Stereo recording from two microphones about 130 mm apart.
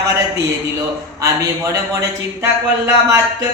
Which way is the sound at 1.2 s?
25° right (ahead or behind).